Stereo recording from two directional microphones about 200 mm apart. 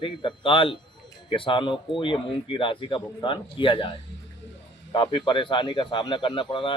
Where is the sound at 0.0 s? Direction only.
25° left (ahead or behind).